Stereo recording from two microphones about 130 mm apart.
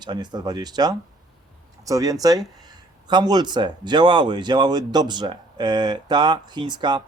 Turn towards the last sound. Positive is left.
turn(degrees=-35)  # may be behind; listen again after turning